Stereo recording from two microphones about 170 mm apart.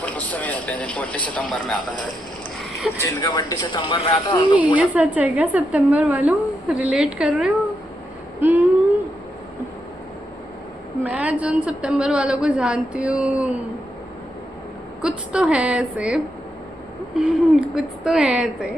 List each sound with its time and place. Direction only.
0.0 s a man's voice: 10° left (ahead or behind)
2.8 s a woman's voice: centre (ahead or behind)
3.2 s a man's voice: 25° left (ahead or behind)
4.8 s a woman's voice: 10° right (ahead or behind)
8.4 s a sound: 10° right (ahead or behind)
11.0 s a woman's voice: 5° right (ahead or behind)
15.0 s a woman's voice: 5° right (ahead or behind)